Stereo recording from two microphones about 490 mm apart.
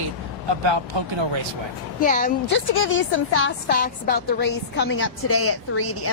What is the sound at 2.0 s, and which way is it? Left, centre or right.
A woman's voice, centre.